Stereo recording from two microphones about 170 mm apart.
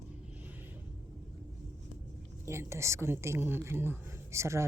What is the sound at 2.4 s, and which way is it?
A woman's voice, 15° right (ahead or behind).